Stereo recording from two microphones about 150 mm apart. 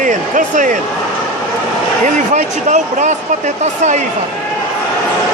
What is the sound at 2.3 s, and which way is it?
Speech, 50° right (ahead or behind).